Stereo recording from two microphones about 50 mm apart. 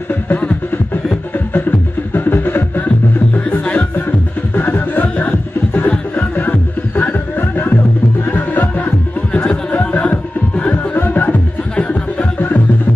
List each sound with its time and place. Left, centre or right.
0.3 s music: left
1.5 s music: left
4.6 s music: left
7.0 s a sound: left
8.3 s music: left
9.3 s a sound: centre
9.7 s music: left
11.7 s music: left